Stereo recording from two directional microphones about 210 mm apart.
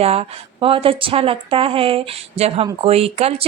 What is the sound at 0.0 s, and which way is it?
A woman's voice, 30° right (ahead or behind).